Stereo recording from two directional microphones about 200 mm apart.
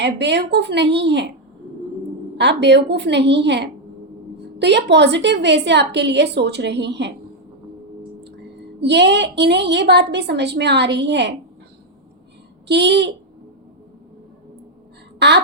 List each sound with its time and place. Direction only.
0.0 s a woman's voice: 60° right (ahead or behind)
2.4 s a woman's voice: 60° right (ahead or behind)
8.2 s a woman's voice: 55° right (ahead or behind)
12.6 s a woman's voice: 60° right (ahead or behind)